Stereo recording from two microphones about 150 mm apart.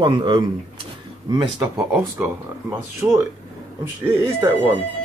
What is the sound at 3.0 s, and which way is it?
Speech, 20° right (ahead or behind).